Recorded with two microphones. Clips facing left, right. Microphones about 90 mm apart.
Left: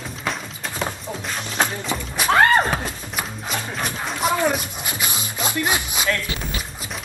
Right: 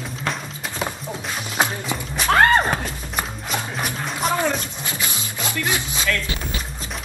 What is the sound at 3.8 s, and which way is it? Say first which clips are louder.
Music: left 3 dB; 5° left (ahead or behind).